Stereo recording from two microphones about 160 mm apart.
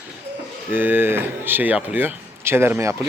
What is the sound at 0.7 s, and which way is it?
A man's voice, 10° right (ahead or behind).